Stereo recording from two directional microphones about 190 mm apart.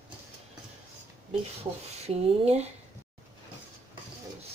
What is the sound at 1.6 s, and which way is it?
Speech, 35° right (ahead or behind).